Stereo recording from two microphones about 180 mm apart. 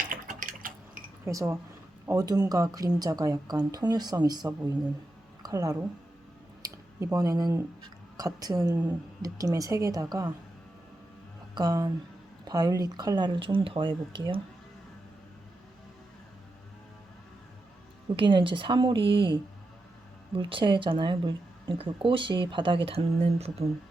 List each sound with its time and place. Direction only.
0.0 s drip: 50° right (ahead or behind)
1.2 s speech: 15° right (ahead or behind)
5.4 s a sound: 20° right (ahead or behind)
7.0 s speech: 20° right (ahead or behind)
11.5 s speech: 20° right (ahead or behind)
18.2 s speech: 30° right (ahead or behind)